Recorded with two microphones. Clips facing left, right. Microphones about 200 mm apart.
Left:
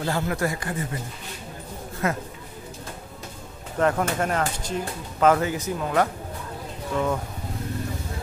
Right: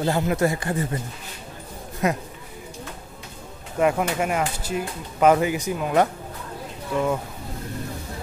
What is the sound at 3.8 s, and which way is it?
Speech, 10° right (ahead or behind).